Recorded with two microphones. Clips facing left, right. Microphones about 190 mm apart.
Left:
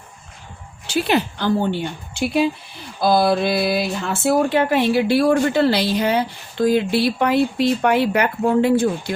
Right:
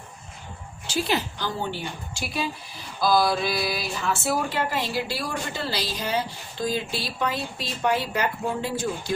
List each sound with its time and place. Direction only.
0.9 s speech: 60° left (ahead or behind)
3.0 s mantra: 25° left (ahead or behind)
3.2 s speech: 60° left (ahead or behind)